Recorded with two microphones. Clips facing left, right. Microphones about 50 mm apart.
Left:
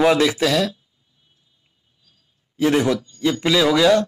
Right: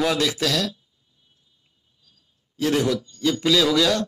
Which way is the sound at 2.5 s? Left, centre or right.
Left.